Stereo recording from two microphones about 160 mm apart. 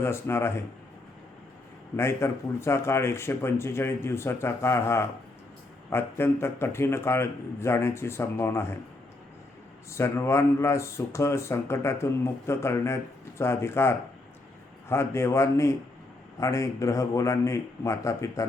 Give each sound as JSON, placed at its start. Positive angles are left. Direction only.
{"t": 0.0, "sound": "speech", "side_deg": 15}
{"t": 2.0, "sound": "speech", "side_deg": 15}
{"t": 9.9, "sound": "a man's voice", "side_deg": 15}